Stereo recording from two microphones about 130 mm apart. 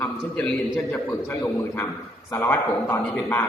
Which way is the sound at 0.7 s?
20° left (ahead or behind).